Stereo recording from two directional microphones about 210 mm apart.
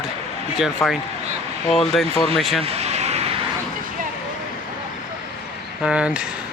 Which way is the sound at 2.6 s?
30° right (ahead or behind).